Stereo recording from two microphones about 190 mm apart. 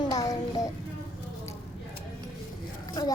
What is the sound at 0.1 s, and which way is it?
Child singing, 20° left (ahead or behind).